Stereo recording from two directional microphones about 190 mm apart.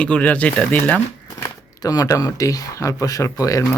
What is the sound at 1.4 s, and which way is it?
Speech, 20° left (ahead or behind).